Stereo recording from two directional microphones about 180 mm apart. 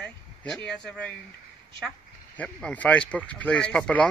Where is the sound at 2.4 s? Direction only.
5° left (ahead or behind).